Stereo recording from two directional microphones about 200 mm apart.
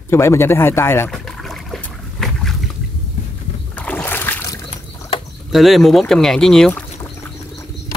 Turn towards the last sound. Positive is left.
turn(degrees=5)  # may be behind; listen again after turning